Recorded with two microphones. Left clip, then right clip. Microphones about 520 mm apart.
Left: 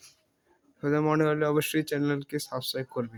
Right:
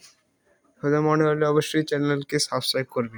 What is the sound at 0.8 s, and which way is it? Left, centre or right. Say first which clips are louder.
Speech: right 4 dB; left.